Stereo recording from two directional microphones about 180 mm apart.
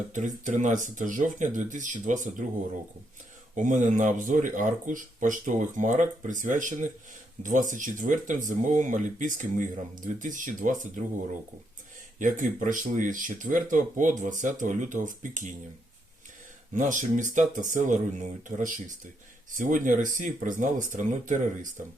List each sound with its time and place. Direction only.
0.1 s speech: 45° right (ahead or behind)
3.5 s speech: 45° right (ahead or behind)
12.2 s speech: 45° right (ahead or behind)
16.7 s speech: 45° right (ahead or behind)